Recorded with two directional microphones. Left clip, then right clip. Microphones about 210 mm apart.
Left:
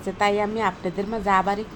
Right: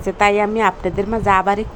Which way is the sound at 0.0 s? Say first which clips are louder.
Right 7 dB; 20° right (ahead or behind).